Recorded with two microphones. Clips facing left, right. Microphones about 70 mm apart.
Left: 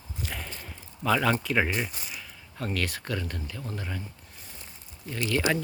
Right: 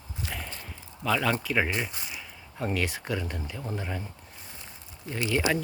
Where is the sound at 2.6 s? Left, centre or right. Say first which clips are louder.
Right 2 dB; centre.